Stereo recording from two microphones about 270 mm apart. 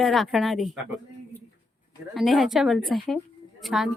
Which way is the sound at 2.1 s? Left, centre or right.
Centre.